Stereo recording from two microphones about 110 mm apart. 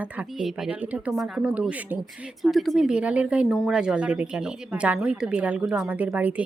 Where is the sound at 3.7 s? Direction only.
5° right (ahead or behind).